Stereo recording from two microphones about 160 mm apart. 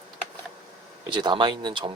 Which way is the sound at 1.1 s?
30° right (ahead or behind).